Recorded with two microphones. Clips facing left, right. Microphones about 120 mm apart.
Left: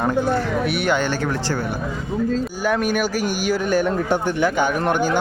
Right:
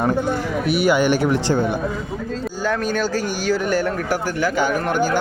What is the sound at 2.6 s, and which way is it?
Speech, 10° left (ahead or behind).